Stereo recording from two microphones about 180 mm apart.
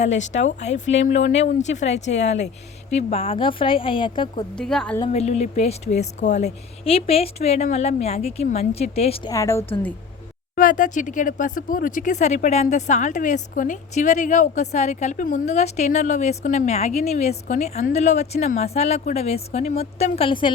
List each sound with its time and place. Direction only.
0.0 s speech: 40° left (ahead or behind)
4.5 s a woman's voice: 5° left (ahead or behind)
5.0 s speech: 35° left (ahead or behind)
9.3 s a woman's voice: 15° left (ahead or behind)
10.5 s speech: 50° left (ahead or behind); by 20.5 s 30° left (ahead or behind)